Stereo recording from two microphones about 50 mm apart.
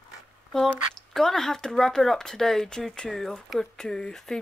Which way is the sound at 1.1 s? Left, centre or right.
Centre.